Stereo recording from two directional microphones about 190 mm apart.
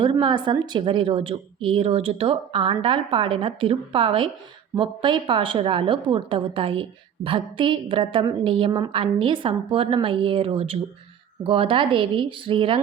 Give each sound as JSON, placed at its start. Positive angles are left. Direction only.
{"t": 0.0, "sound": "a woman's voice", "side_deg": -25}